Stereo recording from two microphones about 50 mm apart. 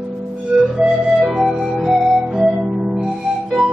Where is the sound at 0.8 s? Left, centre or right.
Centre.